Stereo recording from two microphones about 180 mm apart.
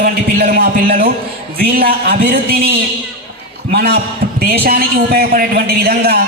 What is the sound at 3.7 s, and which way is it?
Speech, 60° right (ahead or behind).